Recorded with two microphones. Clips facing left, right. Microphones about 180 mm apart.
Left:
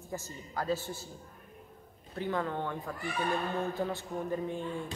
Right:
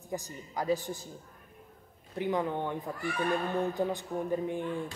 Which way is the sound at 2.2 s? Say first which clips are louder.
Right 3 dB; 15° right (ahead or behind).